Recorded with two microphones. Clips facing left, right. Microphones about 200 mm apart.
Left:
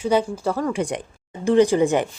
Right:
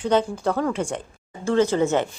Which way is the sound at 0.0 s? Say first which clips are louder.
Left 1 dB; 10° left (ahead or behind).